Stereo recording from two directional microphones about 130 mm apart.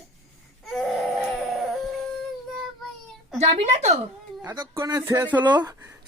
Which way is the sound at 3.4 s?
55° right (ahead or behind).